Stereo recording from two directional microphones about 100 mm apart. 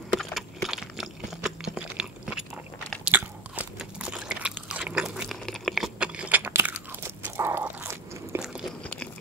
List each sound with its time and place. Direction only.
0.2 s chewing: centre (ahead or behind)
3.1 s biting: 15° right (ahead or behind)
5.4 s a sound: 5° left (ahead or behind)
5.9 s crunch: 10° right (ahead or behind)
8.8 s chewing: 15° left (ahead or behind)